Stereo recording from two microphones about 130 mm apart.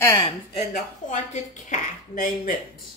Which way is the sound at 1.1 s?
70° left (ahead or behind).